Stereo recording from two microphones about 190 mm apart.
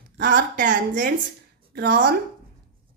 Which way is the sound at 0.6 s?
45° right (ahead or behind).